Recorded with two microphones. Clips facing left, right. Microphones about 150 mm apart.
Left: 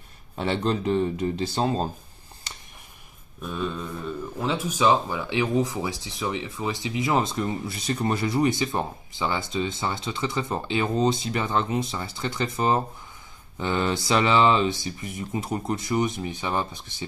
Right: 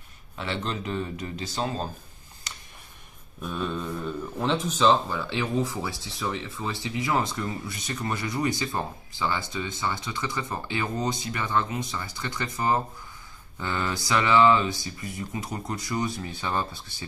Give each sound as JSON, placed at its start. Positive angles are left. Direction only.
{"t": 0.4, "sound": "speech", "side_deg": 35}
{"t": 3.4, "sound": "speech", "side_deg": 0}